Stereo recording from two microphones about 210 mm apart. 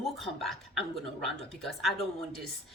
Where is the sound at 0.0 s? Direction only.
Centre (ahead or behind).